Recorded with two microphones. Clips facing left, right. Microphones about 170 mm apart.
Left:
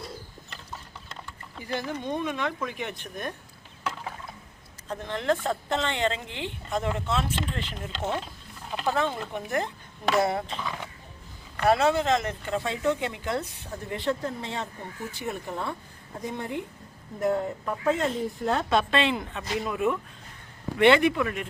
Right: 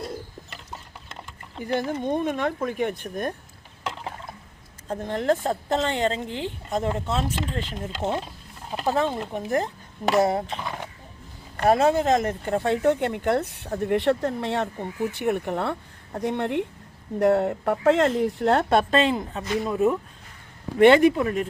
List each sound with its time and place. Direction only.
1.5 s speech: 50° right (ahead or behind)
3.8 s mechanisms: 25° right (ahead or behind)
4.9 s a woman's voice: 45° right (ahead or behind)
8.0 s speech: 10° right (ahead or behind)
9.0 s a woman's voice: 35° right (ahead or behind)